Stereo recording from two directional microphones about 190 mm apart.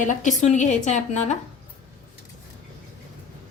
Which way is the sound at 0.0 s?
40° left (ahead or behind).